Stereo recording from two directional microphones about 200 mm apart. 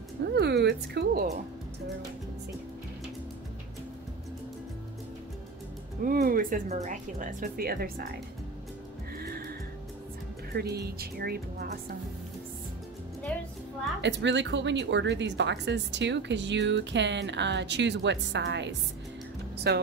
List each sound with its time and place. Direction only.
0.2 s music: 55° right (ahead or behind)
6.0 s speech: 45° right (ahead or behind)
9.2 s music: 50° right (ahead or behind)
10.5 s speech: 55° right (ahead or behind)
13.3 s music: 5° left (ahead or behind)
14.0 s a woman's voice: 65° right (ahead or behind)